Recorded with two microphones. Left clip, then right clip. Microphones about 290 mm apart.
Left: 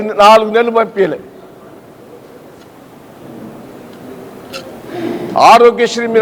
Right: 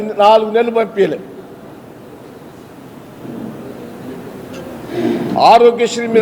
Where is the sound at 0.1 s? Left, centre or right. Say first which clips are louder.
Left 3 dB; left.